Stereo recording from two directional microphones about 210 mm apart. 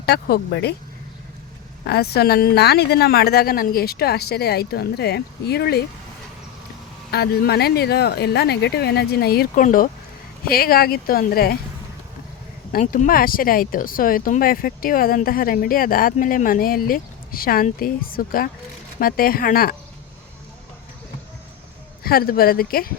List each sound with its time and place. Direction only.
0.0 s speech: 50° left (ahead or behind)
1.8 s speech: 50° left (ahead or behind)
7.1 s speech: 50° left (ahead or behind)
12.7 s speech: 40° left (ahead or behind)
22.0 s speech: 45° left (ahead or behind)